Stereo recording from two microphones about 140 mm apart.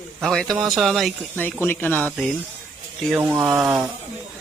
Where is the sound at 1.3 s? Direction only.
15° left (ahead or behind).